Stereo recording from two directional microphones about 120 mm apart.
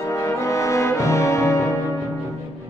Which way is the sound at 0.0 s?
25° left (ahead or behind).